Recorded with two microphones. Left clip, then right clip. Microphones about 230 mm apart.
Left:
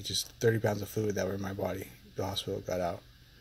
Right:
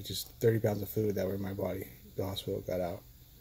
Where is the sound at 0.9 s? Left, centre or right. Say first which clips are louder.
Even; left.